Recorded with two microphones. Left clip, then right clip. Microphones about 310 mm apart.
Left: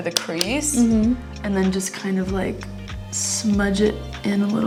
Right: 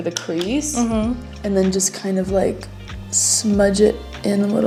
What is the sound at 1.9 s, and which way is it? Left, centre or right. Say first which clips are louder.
Speech: right 6 dB; left.